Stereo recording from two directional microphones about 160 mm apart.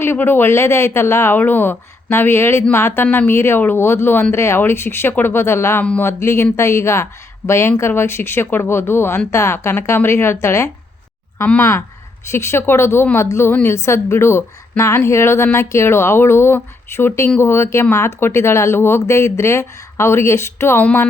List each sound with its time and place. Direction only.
0.0 s a woman's voice: 15° left (ahead or behind)